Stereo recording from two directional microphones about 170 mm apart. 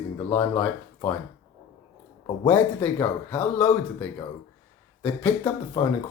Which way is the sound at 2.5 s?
10° left (ahead or behind).